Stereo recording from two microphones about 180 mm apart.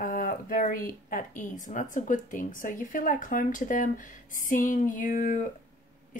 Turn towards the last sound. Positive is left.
turn(degrees=45)  # may be behind; listen again after turning